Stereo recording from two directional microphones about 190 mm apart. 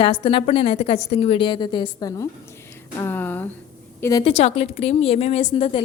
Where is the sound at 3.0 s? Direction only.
10° left (ahead or behind).